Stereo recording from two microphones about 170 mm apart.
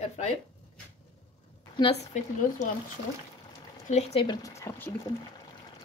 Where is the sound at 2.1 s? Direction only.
45° left (ahead or behind).